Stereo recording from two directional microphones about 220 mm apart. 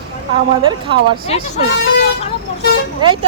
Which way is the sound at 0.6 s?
20° right (ahead or behind).